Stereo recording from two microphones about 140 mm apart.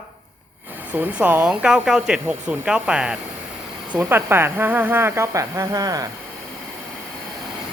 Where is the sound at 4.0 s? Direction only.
15° right (ahead or behind).